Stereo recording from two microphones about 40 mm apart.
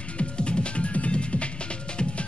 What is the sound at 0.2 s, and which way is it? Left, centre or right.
Music, left.